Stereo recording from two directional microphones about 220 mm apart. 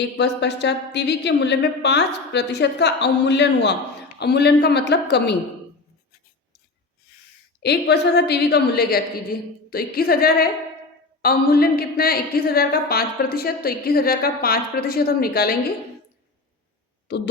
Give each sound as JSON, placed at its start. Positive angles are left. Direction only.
{"t": 0.2, "sound": "speech", "side_deg": 50}
{"t": 7.6, "sound": "speech", "side_deg": 50}
{"t": 17.1, "sound": "speech", "side_deg": 50}